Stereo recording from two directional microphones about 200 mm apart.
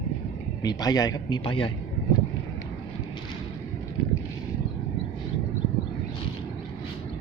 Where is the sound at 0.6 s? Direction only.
20° left (ahead or behind).